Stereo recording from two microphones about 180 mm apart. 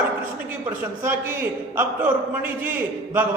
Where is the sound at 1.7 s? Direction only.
10° right (ahead or behind).